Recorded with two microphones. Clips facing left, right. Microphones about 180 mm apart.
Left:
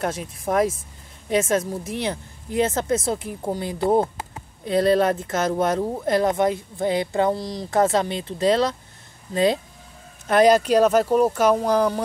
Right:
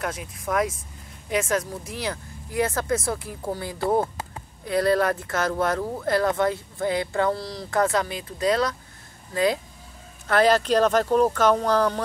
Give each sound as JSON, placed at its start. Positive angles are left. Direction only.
{"t": 0.0, "sound": "a woman's voice", "side_deg": 30}